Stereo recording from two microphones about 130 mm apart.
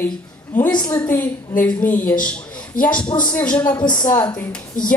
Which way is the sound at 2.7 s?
90° left.